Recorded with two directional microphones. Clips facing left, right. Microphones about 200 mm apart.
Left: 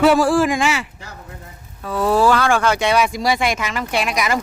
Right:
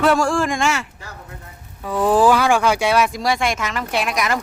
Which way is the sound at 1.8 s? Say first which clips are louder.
Right 1 dB; 15° right (ahead or behind).